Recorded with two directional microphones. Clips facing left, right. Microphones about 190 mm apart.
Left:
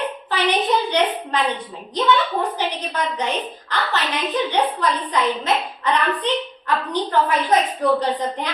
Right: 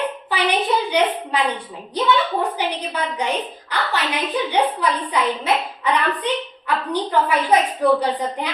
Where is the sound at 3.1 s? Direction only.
10° right (ahead or behind).